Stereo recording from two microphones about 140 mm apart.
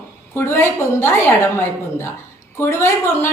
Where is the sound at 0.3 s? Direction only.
15° left (ahead or behind).